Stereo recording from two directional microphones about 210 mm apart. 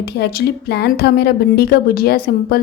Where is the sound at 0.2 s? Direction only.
50° left (ahead or behind).